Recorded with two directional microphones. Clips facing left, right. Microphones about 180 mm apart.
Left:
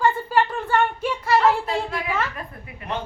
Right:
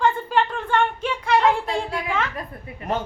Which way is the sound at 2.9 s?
45° right (ahead or behind).